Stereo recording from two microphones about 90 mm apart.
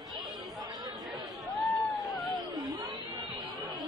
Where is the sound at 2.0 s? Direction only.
Centre (ahead or behind).